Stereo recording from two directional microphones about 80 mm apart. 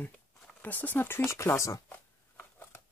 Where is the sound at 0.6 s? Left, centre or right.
Left.